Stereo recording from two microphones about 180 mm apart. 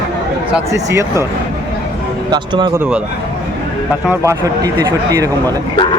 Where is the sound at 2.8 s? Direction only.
5° right (ahead or behind).